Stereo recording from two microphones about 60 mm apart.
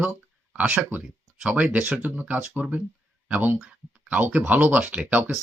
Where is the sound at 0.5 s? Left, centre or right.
Right.